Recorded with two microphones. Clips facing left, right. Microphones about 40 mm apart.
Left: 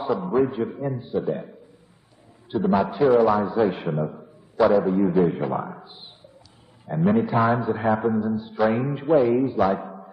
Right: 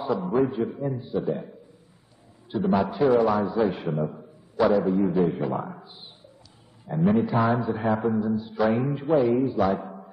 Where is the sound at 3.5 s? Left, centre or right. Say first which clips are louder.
Left 2 dB; centre.